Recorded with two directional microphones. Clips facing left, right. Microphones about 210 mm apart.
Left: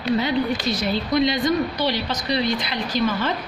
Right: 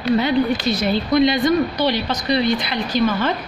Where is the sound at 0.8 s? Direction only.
60° right (ahead or behind).